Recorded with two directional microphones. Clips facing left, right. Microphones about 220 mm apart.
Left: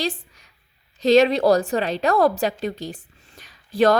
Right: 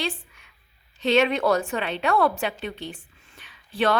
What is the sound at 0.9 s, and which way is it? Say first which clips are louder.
A woman's voice: left 5 dB; 40° left (ahead or behind).